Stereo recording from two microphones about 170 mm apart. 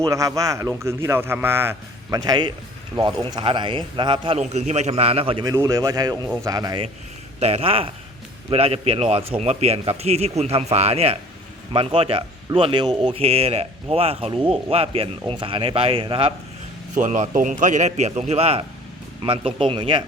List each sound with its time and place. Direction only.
0.0 s a man's voice: 20° right (ahead or behind)
7.3 s a man's voice: 35° right (ahead or behind)
16.9 s a man's voice: 45° right (ahead or behind); by 20.1 s 30° right (ahead or behind)